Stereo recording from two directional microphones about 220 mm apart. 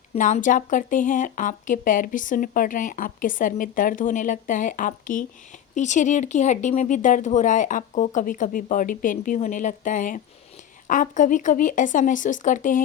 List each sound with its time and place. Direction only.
0.1 s speech: 30° left (ahead or behind)